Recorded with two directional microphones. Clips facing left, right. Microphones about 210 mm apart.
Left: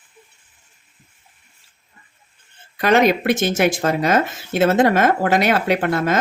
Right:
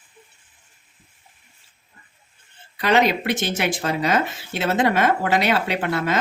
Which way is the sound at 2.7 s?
50° left (ahead or behind).